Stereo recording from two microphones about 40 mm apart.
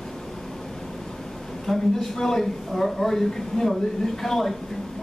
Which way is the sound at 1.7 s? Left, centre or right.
Centre.